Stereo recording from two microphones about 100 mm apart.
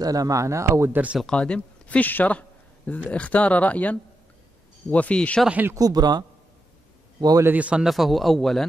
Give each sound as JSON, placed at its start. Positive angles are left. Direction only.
{"t": 0.0, "sound": "speech", "side_deg": -35}
{"t": 1.2, "sound": "speech", "side_deg": 10}
{"t": 5.5, "sound": "a man's voice", "side_deg": -15}
{"t": 5.8, "sound": "a man's voice", "side_deg": -40}
{"t": 7.4, "sound": "a man's voice", "side_deg": -15}
{"t": 7.9, "sound": "a man's voice", "side_deg": 0}